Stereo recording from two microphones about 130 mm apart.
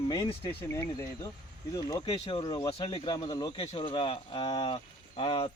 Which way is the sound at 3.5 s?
45° left (ahead or behind).